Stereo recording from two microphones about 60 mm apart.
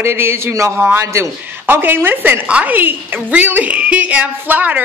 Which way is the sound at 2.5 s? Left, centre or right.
Centre.